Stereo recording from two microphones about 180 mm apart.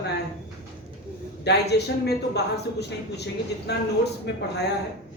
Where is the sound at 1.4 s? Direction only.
65° left (ahead or behind).